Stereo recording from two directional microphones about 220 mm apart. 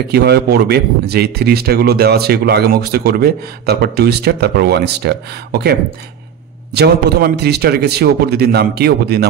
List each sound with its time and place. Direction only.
0.1 s speech: 50° right (ahead or behind)